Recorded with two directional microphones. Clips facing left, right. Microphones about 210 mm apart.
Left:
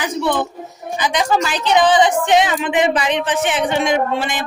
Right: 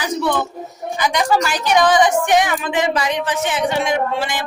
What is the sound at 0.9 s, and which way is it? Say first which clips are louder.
A woman's voice: even; 20° left (ahead or behind).